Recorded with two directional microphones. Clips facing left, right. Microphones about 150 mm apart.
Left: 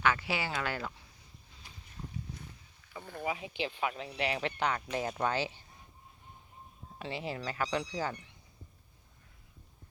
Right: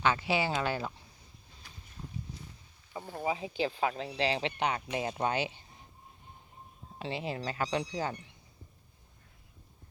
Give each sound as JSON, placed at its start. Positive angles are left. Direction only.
{"t": 0.0, "sound": "speech", "side_deg": -20}
{"t": 3.1, "sound": "speech", "side_deg": -35}
{"t": 7.0, "sound": "speech", "side_deg": -25}